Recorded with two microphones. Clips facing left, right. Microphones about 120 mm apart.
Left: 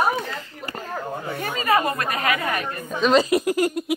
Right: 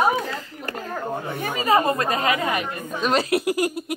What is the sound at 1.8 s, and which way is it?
A woman's voice, 25° right (ahead or behind).